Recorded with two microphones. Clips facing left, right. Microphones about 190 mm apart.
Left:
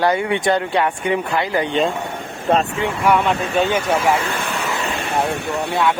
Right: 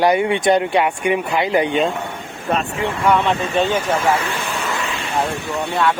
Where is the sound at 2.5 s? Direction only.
30° left (ahead or behind).